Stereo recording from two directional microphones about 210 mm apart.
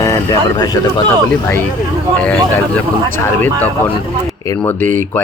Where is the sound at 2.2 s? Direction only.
5° left (ahead or behind).